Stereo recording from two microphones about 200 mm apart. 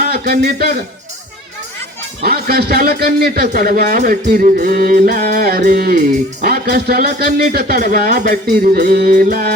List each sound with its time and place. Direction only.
0.0 s a man's voice: 50° right (ahead or behind)
2.2 s a man's voice: 50° right (ahead or behind)